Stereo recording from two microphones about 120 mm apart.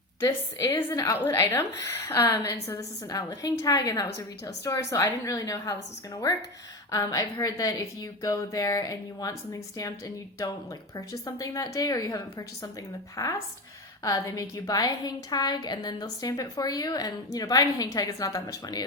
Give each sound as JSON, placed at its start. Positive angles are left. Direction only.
{"t": 0.2, "sound": "a woman's voice", "side_deg": 20}
{"t": 6.9, "sound": "a woman's voice", "side_deg": 30}
{"t": 10.9, "sound": "a woman's voice", "side_deg": 30}